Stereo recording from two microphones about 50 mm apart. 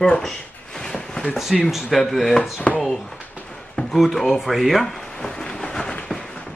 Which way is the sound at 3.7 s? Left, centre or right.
Centre.